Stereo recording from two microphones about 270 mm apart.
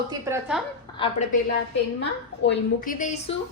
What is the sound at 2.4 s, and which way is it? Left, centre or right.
Speech, left.